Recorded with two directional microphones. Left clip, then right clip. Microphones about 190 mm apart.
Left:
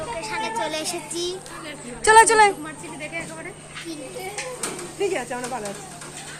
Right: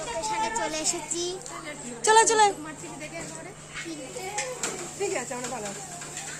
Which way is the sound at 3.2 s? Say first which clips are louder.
Left 8 dB; 30° left (ahead or behind).